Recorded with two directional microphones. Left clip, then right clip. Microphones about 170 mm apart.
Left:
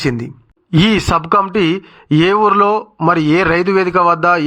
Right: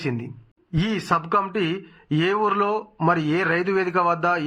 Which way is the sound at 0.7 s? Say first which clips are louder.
Left 10 dB; 50° left (ahead or behind).